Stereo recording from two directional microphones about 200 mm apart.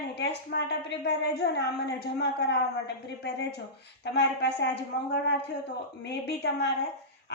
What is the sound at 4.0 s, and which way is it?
Speech, 60° left (ahead or behind).